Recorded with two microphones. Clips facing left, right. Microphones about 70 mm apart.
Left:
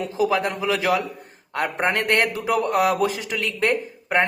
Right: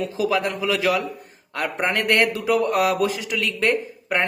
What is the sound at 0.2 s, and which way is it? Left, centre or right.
A man's voice, left.